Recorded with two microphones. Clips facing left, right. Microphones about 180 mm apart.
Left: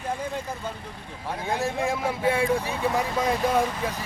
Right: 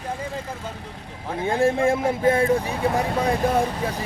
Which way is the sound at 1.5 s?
50° right (ahead or behind).